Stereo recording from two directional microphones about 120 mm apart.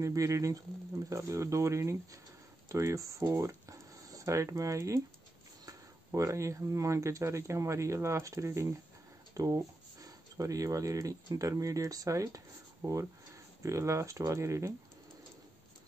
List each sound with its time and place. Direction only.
0.0 s speech: 25° right (ahead or behind)
13.6 s speech: 25° right (ahead or behind)